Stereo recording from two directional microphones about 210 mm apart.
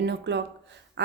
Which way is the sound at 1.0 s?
55° right (ahead or behind).